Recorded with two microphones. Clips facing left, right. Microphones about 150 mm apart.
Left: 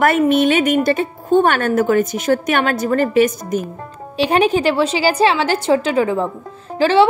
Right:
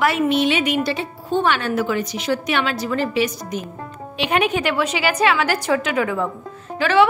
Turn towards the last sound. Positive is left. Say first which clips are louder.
# left 3 dB
turn(degrees=30)  # may be behind; listen again after turning